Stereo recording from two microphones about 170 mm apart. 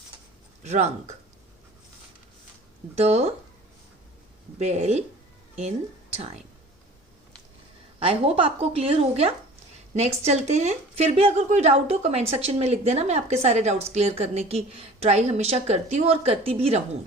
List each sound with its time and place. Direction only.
0.6 s a woman's voice: 40° right (ahead or behind)
2.9 s a woman's voice: 40° right (ahead or behind)
4.5 s a woman's voice: 40° right (ahead or behind)
7.9 s a woman's voice: 35° right (ahead or behind)